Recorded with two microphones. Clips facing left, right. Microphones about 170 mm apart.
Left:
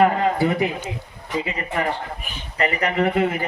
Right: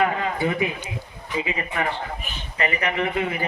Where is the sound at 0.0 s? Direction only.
40° left (ahead or behind).